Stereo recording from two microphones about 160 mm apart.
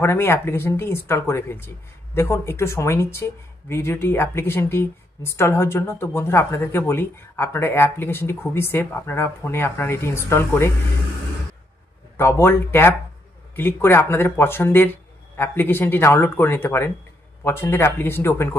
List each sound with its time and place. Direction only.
0.0 s speech: 15° left (ahead or behind)
12.2 s speech: 15° left (ahead or behind)